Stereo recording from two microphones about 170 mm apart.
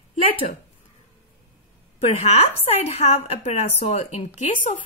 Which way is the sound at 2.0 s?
40° left (ahead or behind).